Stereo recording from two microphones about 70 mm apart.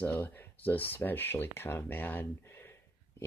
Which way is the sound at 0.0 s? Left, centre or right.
Left.